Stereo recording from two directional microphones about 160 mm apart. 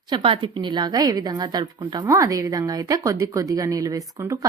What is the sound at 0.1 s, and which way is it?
A woman's voice, 35° right (ahead or behind).